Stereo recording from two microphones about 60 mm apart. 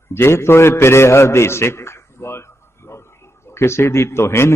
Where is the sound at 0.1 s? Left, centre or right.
Left.